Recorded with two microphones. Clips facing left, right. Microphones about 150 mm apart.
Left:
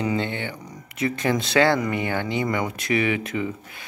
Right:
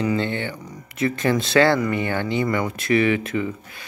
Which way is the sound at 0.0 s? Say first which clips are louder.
Right 2 dB; 15° left (ahead or behind).